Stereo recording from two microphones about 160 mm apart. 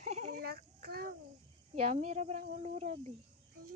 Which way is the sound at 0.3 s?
70° right (ahead or behind).